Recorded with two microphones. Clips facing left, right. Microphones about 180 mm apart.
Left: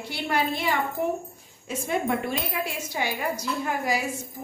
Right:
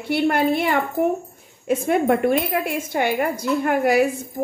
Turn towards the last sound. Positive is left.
turn(degrees=-60)  # may be behind; listen again after turning